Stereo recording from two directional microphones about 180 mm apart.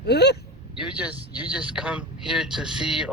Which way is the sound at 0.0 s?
65° left (ahead or behind).